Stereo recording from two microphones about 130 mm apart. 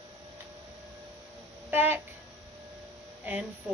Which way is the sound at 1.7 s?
15° right (ahead or behind).